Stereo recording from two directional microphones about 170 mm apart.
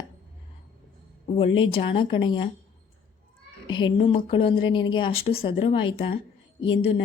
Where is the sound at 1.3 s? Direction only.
30° left (ahead or behind).